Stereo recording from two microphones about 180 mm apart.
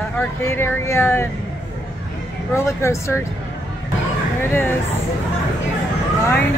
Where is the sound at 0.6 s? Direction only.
15° left (ahead or behind).